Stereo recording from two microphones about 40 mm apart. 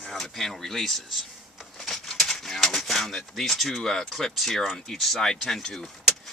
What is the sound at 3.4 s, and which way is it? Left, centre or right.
Speech, centre.